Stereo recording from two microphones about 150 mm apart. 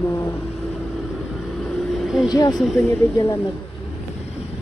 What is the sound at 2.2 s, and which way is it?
Speech, 25° left (ahead or behind).